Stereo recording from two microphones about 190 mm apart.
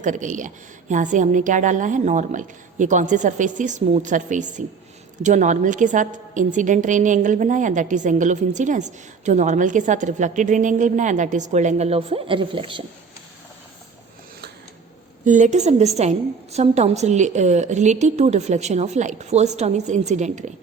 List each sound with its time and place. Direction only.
0.0 s a woman's voice: 40° right (ahead or behind)
15.2 s a woman's voice: 40° right (ahead or behind)